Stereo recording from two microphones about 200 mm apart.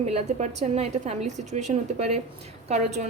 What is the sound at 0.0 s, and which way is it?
A woman's voice, 30° right (ahead or behind).